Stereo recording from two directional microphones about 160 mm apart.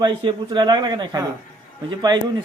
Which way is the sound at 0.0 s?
30° right (ahead or behind).